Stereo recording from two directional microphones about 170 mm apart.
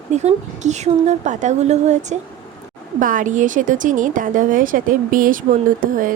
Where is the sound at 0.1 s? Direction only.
40° right (ahead or behind).